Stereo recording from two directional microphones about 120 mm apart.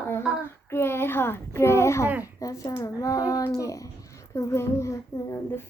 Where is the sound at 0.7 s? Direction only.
20° left (ahead or behind).